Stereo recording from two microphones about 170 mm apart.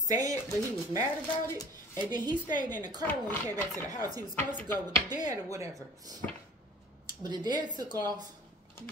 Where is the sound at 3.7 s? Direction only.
20° right (ahead or behind).